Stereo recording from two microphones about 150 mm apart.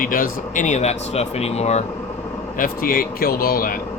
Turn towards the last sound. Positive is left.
turn(degrees=70)  # may be behind; listen again after turning